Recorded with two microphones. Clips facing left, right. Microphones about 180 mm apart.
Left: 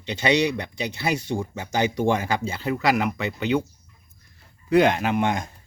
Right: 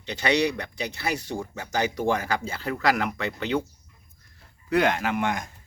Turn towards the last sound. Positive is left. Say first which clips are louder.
# left 3 dB
turn(degrees=25)  # may be behind; listen again after turning